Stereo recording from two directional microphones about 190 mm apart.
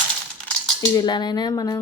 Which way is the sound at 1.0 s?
20° left (ahead or behind).